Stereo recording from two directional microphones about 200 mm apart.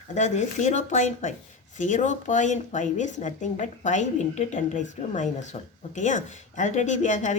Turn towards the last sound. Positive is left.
turn(degrees=40)  # may be behind; listen again after turning